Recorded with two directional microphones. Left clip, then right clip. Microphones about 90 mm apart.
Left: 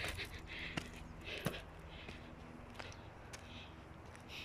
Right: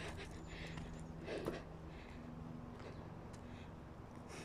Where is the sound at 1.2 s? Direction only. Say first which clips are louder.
Even; 90° right.